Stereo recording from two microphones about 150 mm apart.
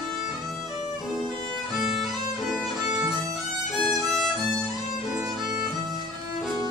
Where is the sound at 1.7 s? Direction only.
Centre (ahead or behind).